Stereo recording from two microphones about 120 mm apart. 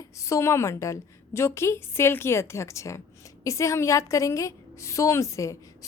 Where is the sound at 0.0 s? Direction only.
25° left (ahead or behind).